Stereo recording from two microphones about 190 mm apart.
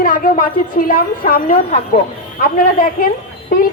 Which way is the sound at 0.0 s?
50° left (ahead or behind).